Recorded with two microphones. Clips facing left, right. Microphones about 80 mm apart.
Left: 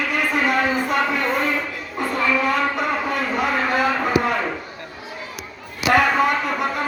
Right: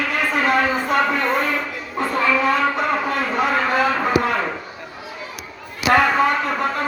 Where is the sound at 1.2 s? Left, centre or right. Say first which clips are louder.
Right 2 dB; centre.